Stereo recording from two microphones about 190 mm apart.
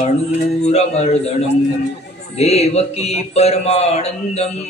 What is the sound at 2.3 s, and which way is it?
Speech, 35° left (ahead or behind).